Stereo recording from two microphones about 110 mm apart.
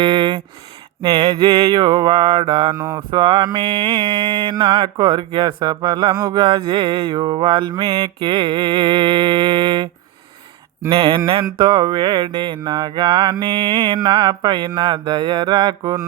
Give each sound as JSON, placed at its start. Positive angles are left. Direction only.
{"t": 0.0, "sound": "a sound", "side_deg": -50}
{"t": 1.0, "sound": "mantra", "side_deg": -40}
{"t": 2.7, "sound": "mantra", "side_deg": -25}
{"t": 3.1, "sound": "mantra", "side_deg": -50}
{"t": 4.5, "sound": "mantra", "side_deg": -30}
{"t": 4.8, "sound": "mantra", "side_deg": -45}
{"t": 7.1, "sound": "mantra", "side_deg": -40}
{"t": 11.6, "sound": "mantra", "side_deg": -45}
{"t": 14.0, "sound": "mantra", "side_deg": -40}